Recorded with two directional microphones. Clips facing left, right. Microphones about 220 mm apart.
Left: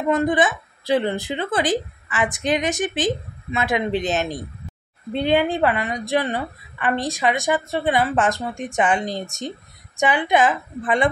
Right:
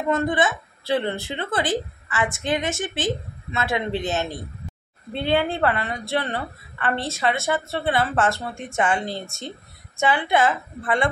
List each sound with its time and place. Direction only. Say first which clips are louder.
0.1 s a woman's voice: left 3 dB; 15° left (ahead or behind)